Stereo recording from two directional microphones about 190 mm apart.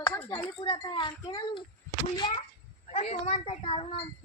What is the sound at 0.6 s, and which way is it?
Speech, 25° left (ahead or behind).